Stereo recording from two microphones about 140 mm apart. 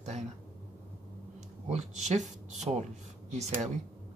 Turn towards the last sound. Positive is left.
turn(degrees=-55)  # may be behind; listen again after turning